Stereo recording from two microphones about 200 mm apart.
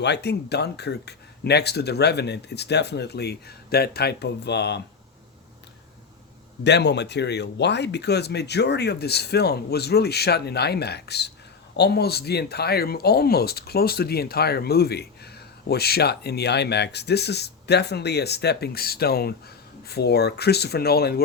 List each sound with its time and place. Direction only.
0.0 s speech: 55° left (ahead or behind)
6.7 s speech: 60° left (ahead or behind)